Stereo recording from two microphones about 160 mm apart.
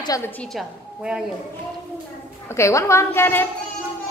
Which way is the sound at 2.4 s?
15° left (ahead or behind).